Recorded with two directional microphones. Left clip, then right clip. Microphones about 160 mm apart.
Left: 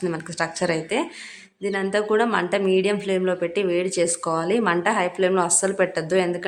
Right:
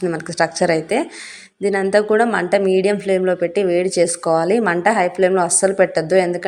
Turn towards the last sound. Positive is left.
turn(degrees=-15)  # may be behind; listen again after turning